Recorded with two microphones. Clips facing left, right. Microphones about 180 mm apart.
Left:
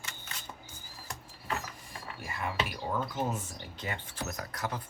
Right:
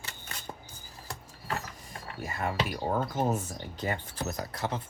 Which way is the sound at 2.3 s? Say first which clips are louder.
Right 3 dB; 45° right (ahead or behind).